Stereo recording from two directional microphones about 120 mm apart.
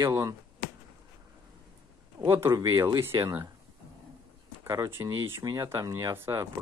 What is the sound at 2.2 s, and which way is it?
Speech, 20° right (ahead or behind).